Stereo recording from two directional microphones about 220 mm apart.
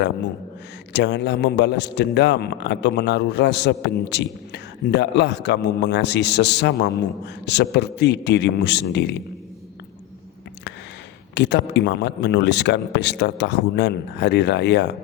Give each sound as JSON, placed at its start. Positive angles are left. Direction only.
{"t": 0.9, "sound": "a man's voice", "side_deg": 50}
{"t": 11.3, "sound": "a man's voice", "side_deg": 50}